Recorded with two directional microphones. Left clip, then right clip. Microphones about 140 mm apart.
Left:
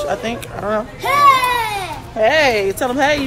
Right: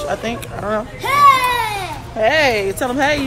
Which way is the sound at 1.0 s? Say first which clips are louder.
Even; 25° left (ahead or behind).